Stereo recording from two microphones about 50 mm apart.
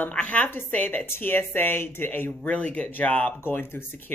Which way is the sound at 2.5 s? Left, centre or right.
Left.